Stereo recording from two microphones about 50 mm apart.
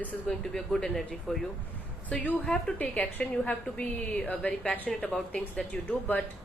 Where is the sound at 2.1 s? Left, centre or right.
Left.